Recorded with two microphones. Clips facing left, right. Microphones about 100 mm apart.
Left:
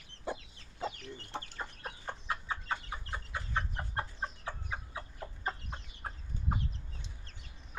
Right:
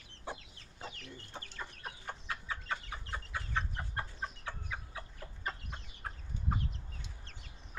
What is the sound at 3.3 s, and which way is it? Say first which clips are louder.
Chicken: left 1 dB; 15° left (ahead or behind).